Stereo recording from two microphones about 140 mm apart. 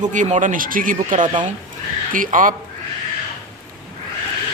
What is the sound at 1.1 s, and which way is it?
Speech, 35° right (ahead or behind).